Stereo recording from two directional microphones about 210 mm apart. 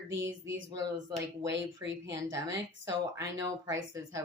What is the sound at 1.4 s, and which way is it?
Speech, 60° right (ahead or behind).